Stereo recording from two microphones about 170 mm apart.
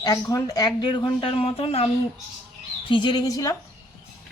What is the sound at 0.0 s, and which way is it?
Speech, 20° left (ahead or behind).